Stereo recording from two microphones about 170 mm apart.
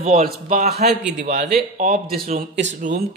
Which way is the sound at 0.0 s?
40° right (ahead or behind).